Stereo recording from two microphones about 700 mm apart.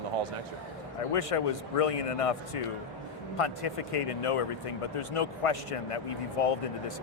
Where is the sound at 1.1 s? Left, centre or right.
Left.